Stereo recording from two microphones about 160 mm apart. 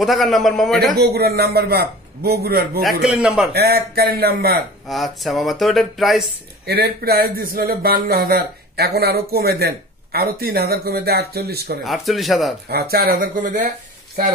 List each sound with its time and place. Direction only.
0.0 s speech: centre (ahead or behind)
0.9 s speech: 80° right
3.0 s speech: 5° right (ahead or behind)
3.5 s speech: 80° right
4.8 s speech: centre (ahead or behind)
6.6 s speech: 75° right (ahead or behind)
11.8 s speech: centre (ahead or behind)
12.6 s speech: 80° right; by 13.7 s 55° right (ahead or behind)